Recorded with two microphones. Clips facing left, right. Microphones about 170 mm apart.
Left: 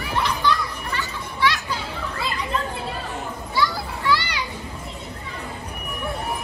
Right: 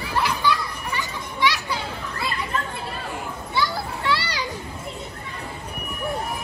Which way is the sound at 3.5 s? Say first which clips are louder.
Left 1 dB; 30° right (ahead or behind).